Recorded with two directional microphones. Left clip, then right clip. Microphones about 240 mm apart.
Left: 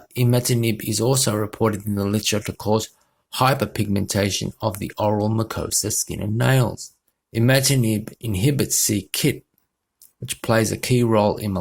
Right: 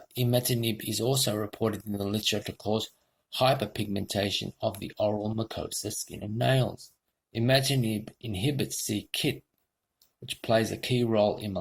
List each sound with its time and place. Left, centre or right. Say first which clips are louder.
0.1 s speech: left 6 dB; left